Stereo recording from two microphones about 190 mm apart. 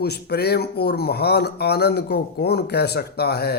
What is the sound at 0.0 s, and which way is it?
Speech, 60° left (ahead or behind).